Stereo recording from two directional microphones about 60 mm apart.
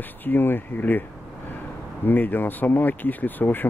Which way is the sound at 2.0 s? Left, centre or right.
Left.